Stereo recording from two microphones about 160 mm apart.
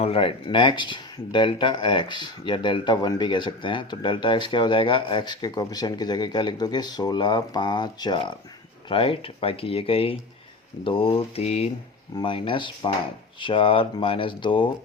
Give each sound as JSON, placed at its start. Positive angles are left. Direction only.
{"t": 0.0, "sound": "speech", "side_deg": 35}